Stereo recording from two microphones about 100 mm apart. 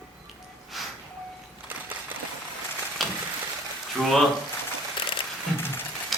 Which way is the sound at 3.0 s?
Centre (ahead or behind).